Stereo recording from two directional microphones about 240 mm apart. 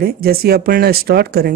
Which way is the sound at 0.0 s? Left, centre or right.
Right.